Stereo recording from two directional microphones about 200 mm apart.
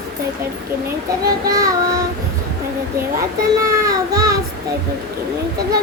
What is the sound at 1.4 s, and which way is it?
Child singing, 15° right (ahead or behind).